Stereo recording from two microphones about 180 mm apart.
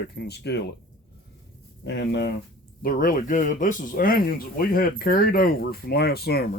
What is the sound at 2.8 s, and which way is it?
Speech, 55° left (ahead or behind).